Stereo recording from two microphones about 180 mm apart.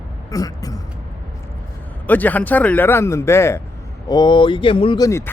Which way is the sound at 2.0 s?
10° left (ahead or behind).